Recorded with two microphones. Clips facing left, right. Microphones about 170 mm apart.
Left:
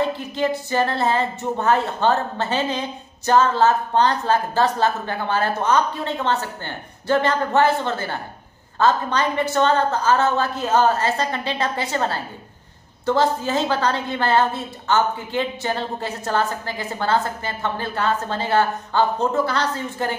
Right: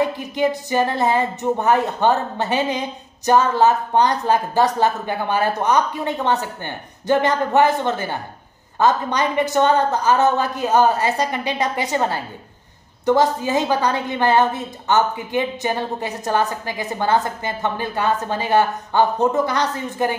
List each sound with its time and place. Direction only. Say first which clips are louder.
0.0 s a woman's voice: right 2 dB; 15° right (ahead or behind)